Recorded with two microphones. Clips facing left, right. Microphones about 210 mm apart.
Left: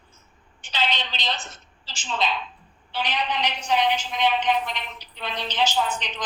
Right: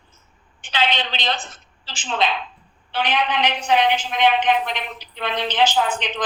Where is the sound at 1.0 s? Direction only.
60° right (ahead or behind).